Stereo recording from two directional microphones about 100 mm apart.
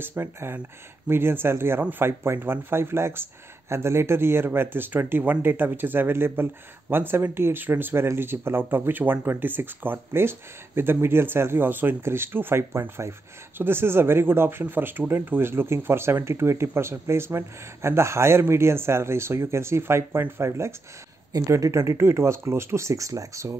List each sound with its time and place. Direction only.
0.0 s speech: 20° right (ahead or behind)